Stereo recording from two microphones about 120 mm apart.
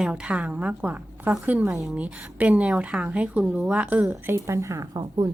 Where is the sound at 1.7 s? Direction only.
Centre (ahead or behind).